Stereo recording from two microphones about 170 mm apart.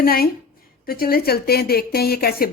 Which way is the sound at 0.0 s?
60° left (ahead or behind).